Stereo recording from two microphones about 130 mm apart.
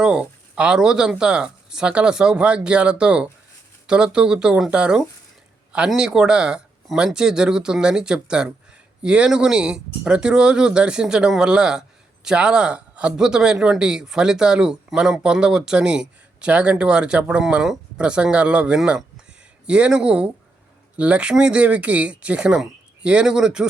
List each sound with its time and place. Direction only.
0.0 s speech: 5° right (ahead or behind)